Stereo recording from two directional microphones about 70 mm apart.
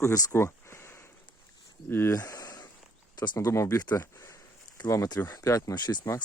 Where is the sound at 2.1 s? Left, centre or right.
Left.